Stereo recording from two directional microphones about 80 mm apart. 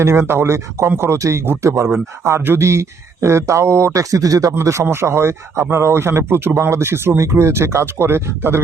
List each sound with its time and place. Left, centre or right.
0.0 s speech: right